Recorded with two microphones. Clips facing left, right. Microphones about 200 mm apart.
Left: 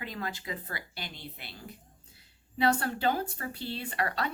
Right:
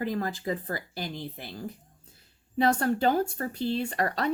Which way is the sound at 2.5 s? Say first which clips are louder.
Right 4 dB; 45° right (ahead or behind).